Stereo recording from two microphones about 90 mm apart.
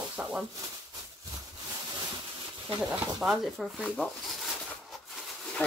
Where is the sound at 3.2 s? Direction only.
Centre (ahead or behind).